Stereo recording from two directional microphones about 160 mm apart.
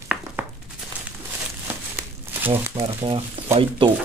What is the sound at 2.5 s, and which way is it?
Speech, 35° right (ahead or behind).